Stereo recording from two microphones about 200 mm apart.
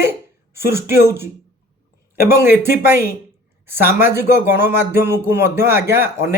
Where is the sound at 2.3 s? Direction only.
10° right (ahead or behind).